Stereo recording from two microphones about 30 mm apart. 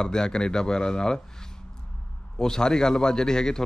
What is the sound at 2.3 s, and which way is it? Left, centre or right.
Speech, left.